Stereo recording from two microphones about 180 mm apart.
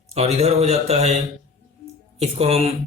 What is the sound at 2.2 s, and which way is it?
Speech, 35° right (ahead or behind).